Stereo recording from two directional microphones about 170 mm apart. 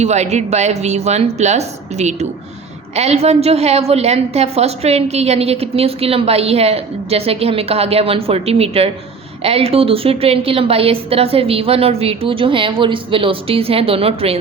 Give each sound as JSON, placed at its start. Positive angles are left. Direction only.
{"t": 0.0, "sound": "a woman's voice", "side_deg": -40}